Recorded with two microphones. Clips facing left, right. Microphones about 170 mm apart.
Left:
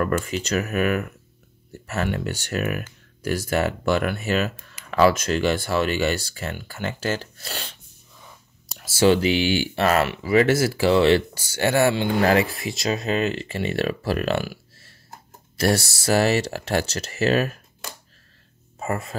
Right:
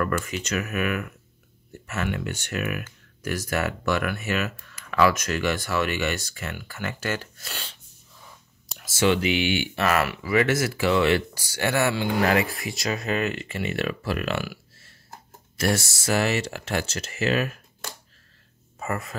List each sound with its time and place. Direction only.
0.0 s speech: 30° left (ahead or behind)
8.7 s speech: 35° left (ahead or behind)
18.8 s speech: 30° left (ahead or behind)